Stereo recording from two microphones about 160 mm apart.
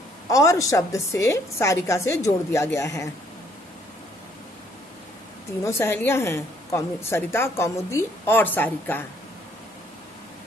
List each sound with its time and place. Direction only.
0.3 s a woman's voice: 20° left (ahead or behind)
5.6 s a woman's voice: 15° left (ahead or behind)